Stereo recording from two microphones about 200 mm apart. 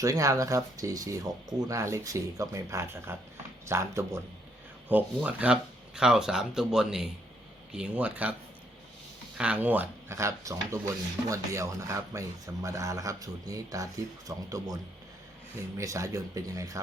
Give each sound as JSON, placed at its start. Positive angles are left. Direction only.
{"t": 0.0, "sound": "speech", "side_deg": -15}
{"t": 9.4, "sound": "speech", "side_deg": -5}
{"t": 15.8, "sound": "speech", "side_deg": -15}